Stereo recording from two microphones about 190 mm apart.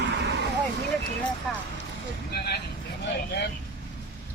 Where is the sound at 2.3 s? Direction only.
55° left (ahead or behind).